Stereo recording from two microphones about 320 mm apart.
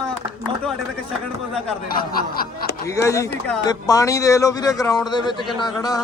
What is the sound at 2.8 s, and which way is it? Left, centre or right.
Speech, centre.